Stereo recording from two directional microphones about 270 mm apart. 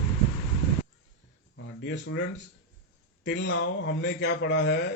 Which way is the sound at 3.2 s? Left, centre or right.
Left.